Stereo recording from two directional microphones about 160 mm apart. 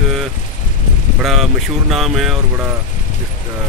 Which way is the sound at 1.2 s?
Centre (ahead or behind).